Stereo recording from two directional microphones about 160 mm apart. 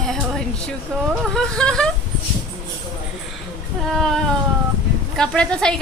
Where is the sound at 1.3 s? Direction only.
5° left (ahead or behind).